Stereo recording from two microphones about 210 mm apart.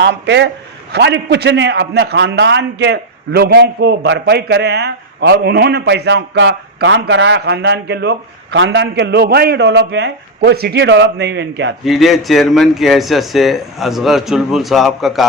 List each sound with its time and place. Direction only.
0.0 s a man's voice: 55° right (ahead or behind)
11.9 s speech: centre (ahead or behind)